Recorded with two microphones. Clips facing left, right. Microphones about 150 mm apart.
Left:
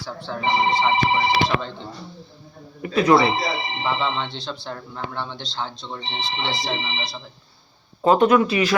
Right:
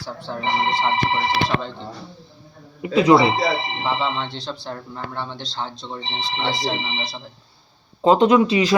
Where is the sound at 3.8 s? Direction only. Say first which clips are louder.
Even; 5° right (ahead or behind).